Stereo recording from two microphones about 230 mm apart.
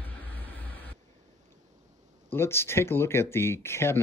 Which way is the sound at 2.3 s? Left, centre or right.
Centre.